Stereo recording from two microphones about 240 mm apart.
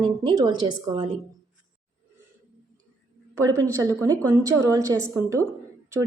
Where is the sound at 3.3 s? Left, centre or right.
Centre.